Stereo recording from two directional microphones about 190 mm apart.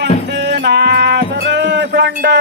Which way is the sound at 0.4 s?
65° right (ahead or behind).